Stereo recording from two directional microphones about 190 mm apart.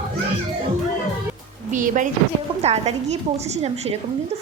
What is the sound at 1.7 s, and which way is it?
A woman's voice, 40° right (ahead or behind).